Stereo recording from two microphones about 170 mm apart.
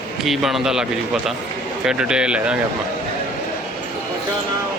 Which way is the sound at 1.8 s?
5° right (ahead or behind).